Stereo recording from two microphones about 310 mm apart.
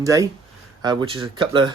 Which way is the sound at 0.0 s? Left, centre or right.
Centre.